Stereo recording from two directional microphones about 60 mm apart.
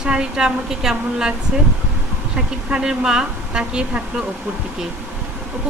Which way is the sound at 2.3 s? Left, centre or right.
Centre.